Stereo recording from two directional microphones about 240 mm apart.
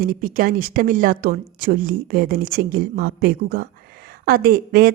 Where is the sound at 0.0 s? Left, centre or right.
Right.